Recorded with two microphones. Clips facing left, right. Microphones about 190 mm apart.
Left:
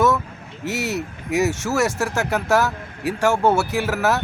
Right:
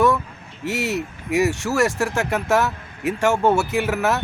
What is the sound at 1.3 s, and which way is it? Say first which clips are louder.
Speech: even; centre (ahead or behind).